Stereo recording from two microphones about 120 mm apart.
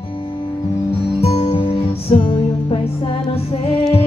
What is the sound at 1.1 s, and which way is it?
Music, 60° left (ahead or behind).